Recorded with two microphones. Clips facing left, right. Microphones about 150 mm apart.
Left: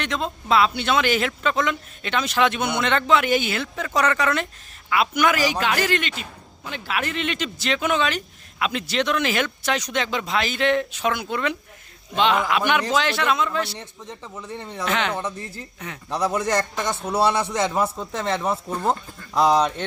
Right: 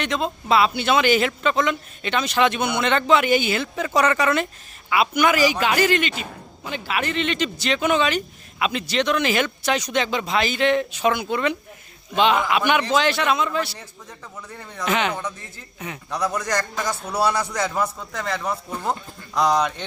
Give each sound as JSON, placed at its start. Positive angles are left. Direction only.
{"t": 0.0, "sound": "speech", "side_deg": -5}
{"t": 13.7, "sound": "a man's voice", "side_deg": 25}
{"t": 14.8, "sound": "speech", "side_deg": -5}
{"t": 16.0, "sound": "a man's voice", "side_deg": 30}